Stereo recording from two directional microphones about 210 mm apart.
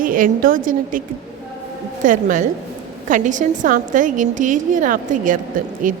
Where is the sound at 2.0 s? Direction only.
35° right (ahead or behind).